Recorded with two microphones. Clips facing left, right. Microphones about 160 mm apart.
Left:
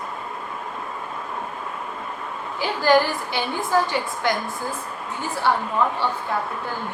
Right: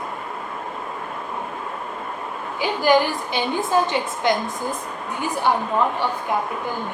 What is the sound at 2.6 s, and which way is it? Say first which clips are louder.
A woman's voice: right 1 dB; 15° right (ahead or behind).